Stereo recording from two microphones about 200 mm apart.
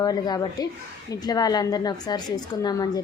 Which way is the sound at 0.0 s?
20° left (ahead or behind).